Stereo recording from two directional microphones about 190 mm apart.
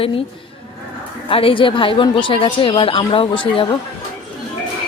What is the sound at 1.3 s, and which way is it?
A woman's voice, 30° left (ahead or behind).